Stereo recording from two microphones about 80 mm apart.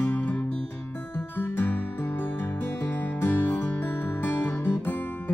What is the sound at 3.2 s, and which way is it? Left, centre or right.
Music, left.